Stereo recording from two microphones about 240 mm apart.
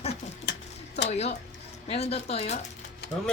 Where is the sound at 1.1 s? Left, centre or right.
Left.